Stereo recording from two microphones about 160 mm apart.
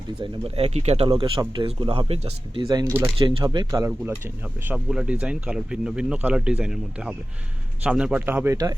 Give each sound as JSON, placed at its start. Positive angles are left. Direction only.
{"t": 0.2, "sound": "speech", "side_deg": -35}
{"t": 2.6, "sound": "speech", "side_deg": -25}
{"t": 3.2, "sound": "speech", "side_deg": -30}
{"t": 4.7, "sound": "speech", "side_deg": -5}